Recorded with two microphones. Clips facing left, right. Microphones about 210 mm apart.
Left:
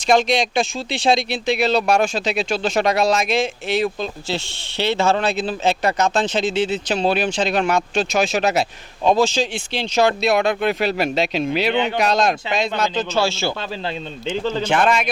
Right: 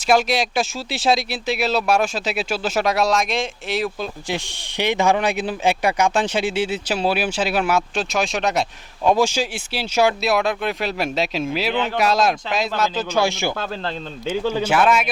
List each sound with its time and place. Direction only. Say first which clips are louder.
0.1 s speech: left 1 dB; 5° right (ahead or behind)
4.0 s speech: left 1 dB; 15° right (ahead or behind); by 8.6 s 5° left (ahead or behind)
9.0 s speech: left 1 dB; 10° right (ahead or behind)
13.1 s speech: right 2 dB; 15° right (ahead or behind)